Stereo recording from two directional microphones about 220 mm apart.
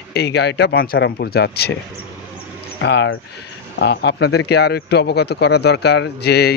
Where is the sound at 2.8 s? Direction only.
55° left (ahead or behind).